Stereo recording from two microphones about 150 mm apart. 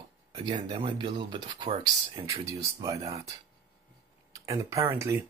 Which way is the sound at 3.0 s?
20° right (ahead or behind).